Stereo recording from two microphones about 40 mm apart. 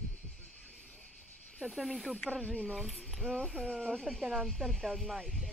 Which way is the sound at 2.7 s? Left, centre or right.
Centre.